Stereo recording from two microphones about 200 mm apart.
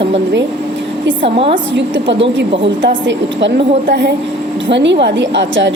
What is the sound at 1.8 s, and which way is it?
A woman's voice, 65° right (ahead or behind).